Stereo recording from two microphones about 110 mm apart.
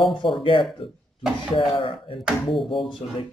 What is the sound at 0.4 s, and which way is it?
Speech, 50° left (ahead or behind).